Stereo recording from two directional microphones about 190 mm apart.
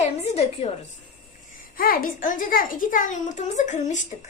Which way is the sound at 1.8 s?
50° left (ahead or behind).